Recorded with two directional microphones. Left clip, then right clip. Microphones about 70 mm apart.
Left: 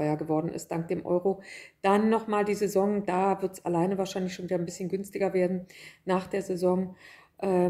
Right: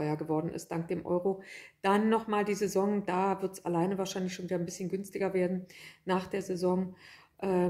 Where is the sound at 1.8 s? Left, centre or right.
Left.